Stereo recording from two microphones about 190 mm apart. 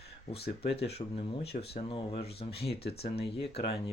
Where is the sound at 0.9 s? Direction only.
30° left (ahead or behind).